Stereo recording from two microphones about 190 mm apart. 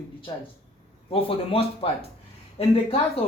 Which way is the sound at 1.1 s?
30° left (ahead or behind).